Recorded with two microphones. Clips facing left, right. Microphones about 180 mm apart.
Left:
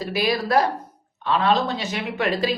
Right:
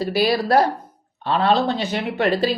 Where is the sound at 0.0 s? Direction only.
35° right (ahead or behind).